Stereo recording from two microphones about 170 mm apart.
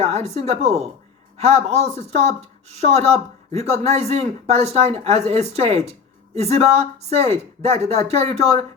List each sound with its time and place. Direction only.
0.0 s speech: 40° right (ahead or behind)